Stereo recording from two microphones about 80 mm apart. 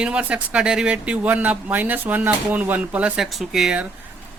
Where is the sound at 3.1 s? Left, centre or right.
Centre.